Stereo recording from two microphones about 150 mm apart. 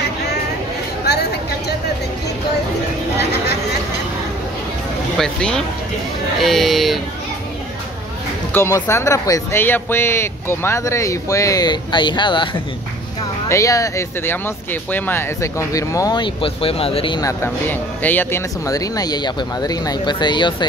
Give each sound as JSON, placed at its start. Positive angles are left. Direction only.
{"t": 5.1, "sound": "speech", "side_deg": 5}
{"t": 8.5, "sound": "speech", "side_deg": 15}
{"t": 13.5, "sound": "speech", "side_deg": 20}
{"t": 17.2, "sound": "speech", "side_deg": 20}
{"t": 18.7, "sound": "speech", "side_deg": 25}